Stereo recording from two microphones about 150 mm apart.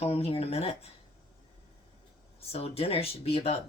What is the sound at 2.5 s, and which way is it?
Speech, 40° left (ahead or behind).